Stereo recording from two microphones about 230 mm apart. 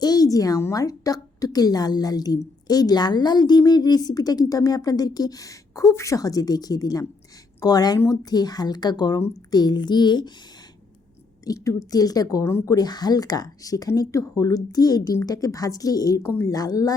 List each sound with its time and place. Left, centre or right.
0.0 s a woman's voice: centre
11.4 s a woman's voice: centre